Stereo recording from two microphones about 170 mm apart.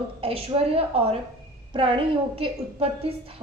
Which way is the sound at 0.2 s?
35° right (ahead or behind).